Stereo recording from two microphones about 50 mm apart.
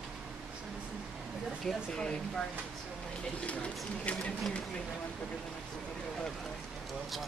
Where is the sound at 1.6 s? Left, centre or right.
Centre.